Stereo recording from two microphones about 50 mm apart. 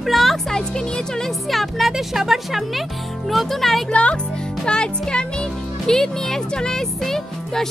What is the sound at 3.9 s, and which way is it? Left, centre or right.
A child's voice, centre.